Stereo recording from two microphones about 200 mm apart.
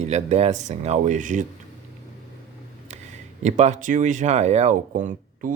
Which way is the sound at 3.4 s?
35° right (ahead or behind).